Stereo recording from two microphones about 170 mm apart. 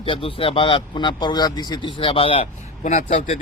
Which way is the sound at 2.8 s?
50° left (ahead or behind).